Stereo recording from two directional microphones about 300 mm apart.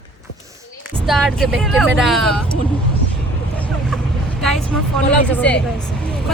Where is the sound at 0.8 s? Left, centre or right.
Centre.